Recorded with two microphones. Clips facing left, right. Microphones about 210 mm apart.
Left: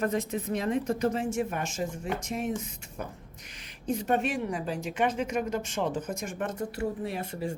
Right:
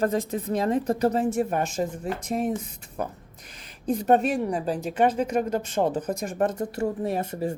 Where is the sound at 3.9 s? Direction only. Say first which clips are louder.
Right 6 dB; 35° right (ahead or behind).